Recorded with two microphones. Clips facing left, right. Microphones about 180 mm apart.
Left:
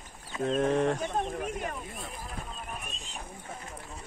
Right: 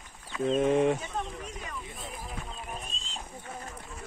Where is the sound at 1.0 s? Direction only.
55° left (ahead or behind).